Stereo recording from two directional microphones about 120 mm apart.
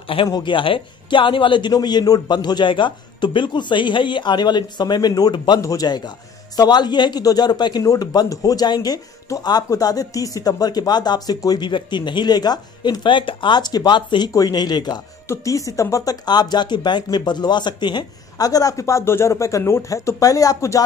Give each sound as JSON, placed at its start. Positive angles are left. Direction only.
{"t": 0.3, "sound": "a man's voice", "side_deg": 40}